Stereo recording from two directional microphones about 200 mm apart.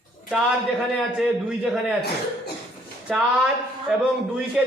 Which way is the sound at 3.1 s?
Centre (ahead or behind).